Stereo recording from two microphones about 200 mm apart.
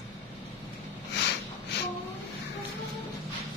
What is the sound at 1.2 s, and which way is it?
Snort, 60° left (ahead or behind).